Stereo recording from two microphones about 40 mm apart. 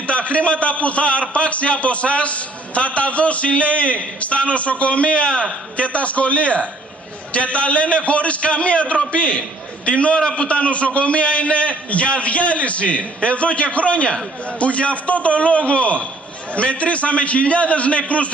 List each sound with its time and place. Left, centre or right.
0.0 s a man's voice: left